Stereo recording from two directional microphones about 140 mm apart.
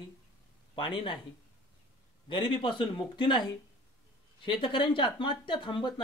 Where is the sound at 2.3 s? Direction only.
35° left (ahead or behind).